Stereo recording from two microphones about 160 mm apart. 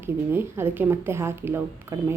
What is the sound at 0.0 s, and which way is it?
A woman's voice, 15° right (ahead or behind).